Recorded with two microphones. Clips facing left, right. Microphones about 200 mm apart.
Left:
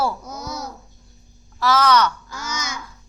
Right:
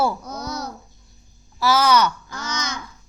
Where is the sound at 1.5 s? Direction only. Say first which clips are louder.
Even; 10° right (ahead or behind).